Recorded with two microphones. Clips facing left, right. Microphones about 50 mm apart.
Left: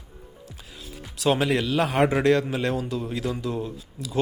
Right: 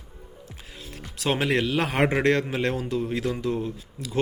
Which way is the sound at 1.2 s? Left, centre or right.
Right.